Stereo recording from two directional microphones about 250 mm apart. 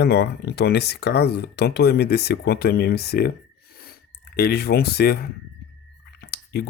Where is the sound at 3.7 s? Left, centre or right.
Left.